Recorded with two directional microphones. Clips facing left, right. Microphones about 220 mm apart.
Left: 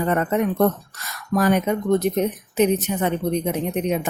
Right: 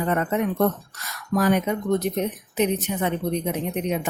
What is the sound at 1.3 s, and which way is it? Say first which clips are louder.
Speech: left 2 dB; 50° left (ahead or behind).